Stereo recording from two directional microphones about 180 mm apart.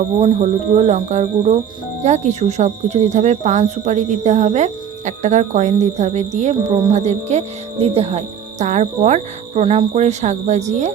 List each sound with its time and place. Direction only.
0.2 s speech: 35° right (ahead or behind)